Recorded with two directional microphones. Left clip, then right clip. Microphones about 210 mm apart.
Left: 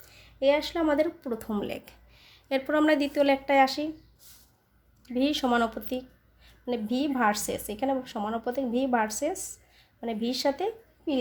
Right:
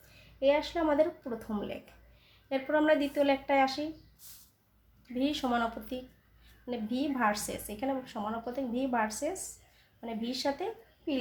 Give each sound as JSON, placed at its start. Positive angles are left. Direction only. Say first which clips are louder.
{"t": 0.3, "sound": "speech", "louder": "left 3 dB", "side_deg": 50}
{"t": 5.0, "sound": "a woman's voice", "louder": "left 6 dB", "side_deg": 50}